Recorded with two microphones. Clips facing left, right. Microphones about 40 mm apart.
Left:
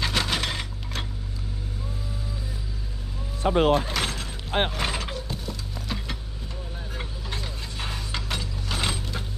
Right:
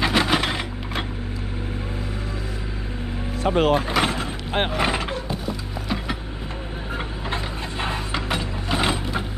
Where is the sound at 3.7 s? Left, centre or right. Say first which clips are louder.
Right 5 dB; right.